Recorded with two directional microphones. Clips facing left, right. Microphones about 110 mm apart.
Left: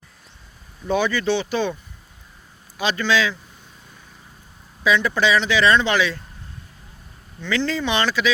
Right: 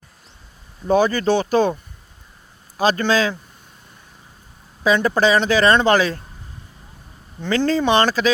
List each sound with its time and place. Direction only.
0.9 s speech: 40° right (ahead or behind)
4.8 s speech: 40° right (ahead or behind)
7.4 s speech: 45° right (ahead or behind)